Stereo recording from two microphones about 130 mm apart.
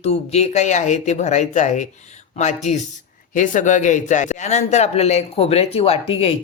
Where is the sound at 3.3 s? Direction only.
80° left; by 6.3 s 50° left (ahead or behind).